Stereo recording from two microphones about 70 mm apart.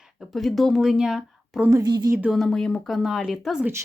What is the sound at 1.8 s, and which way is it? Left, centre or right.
Speech, right.